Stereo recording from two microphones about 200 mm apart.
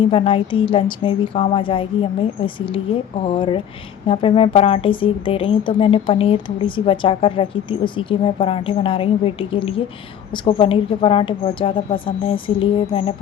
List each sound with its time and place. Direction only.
0.0 s a woman's voice: 25° left (ahead or behind)